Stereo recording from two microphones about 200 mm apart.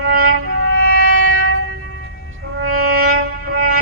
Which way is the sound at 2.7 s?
90° right.